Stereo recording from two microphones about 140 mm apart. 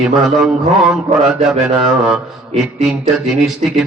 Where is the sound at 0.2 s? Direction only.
Centre (ahead or behind).